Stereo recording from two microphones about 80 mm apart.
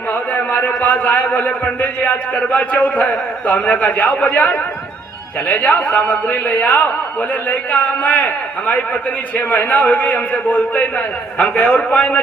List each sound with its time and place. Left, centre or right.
0.1 s a man's voice: centre